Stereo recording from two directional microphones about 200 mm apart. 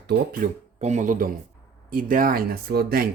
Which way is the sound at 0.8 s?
40° right (ahead or behind).